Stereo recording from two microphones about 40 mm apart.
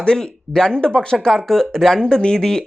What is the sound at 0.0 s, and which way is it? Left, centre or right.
Speech, centre.